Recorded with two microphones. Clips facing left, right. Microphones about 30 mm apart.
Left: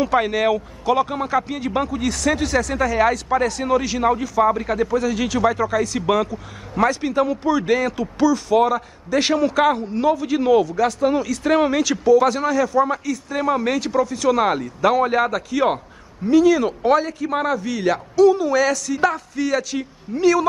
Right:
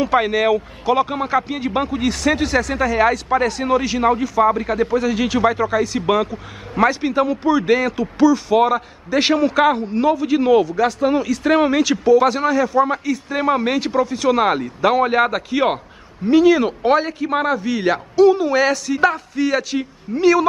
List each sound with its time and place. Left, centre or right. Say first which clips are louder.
0.0 s a man's voice: right 2 dB; centre